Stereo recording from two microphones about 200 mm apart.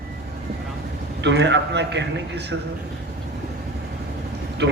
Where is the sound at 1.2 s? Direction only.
60° right (ahead or behind).